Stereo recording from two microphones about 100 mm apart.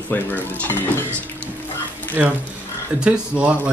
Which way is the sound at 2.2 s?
25° right (ahead or behind).